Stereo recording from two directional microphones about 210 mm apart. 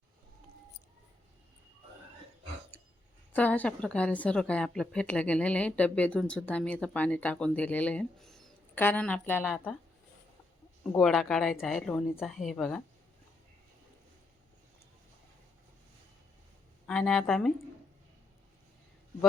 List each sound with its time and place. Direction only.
3.3 s a woman's voice: 5° left (ahead or behind)
10.9 s a woman's voice: centre (ahead or behind)
16.8 s a woman's voice: centre (ahead or behind)